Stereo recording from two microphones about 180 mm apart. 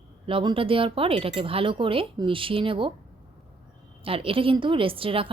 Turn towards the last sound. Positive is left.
turn(degrees=-30)  # may be behind; listen again after turning